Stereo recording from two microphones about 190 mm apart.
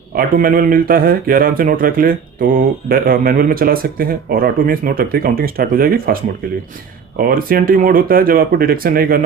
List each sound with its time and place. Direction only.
0.1 s speech: 50° right (ahead or behind)
7.2 s speech: 50° right (ahead or behind)